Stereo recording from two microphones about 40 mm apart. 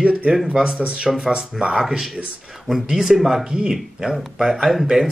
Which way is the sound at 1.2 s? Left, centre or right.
Right.